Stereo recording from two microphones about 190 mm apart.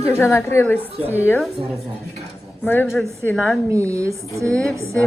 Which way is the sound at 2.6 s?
10° left (ahead or behind).